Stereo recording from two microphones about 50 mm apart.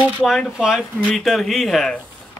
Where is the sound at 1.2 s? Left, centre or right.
Centre.